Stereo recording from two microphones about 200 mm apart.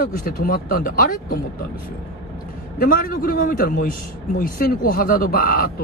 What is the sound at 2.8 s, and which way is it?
Speech, 45° left (ahead or behind).